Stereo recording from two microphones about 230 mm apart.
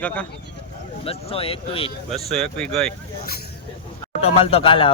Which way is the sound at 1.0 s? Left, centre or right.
Left.